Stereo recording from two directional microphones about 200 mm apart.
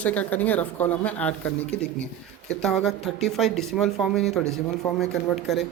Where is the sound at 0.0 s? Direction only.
5° left (ahead or behind).